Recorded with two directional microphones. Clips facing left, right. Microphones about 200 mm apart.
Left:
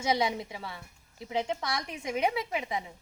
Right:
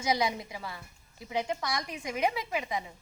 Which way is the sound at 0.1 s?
25° left (ahead or behind).